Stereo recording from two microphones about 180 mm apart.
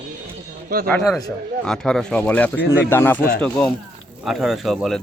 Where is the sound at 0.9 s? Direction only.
5° left (ahead or behind).